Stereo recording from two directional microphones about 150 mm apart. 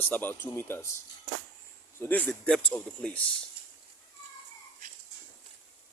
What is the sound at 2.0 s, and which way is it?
Speech, 10° left (ahead or behind).